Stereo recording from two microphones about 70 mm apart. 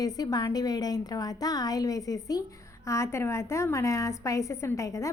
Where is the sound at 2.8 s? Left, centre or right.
Left.